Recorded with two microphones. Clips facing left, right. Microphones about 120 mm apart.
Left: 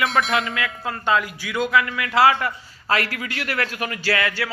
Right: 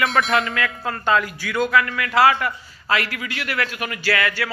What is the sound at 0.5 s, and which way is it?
A man's voice, 15° left (ahead or behind).